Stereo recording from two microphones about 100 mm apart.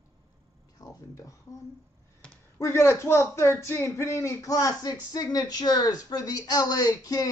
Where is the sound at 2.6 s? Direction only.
25° left (ahead or behind).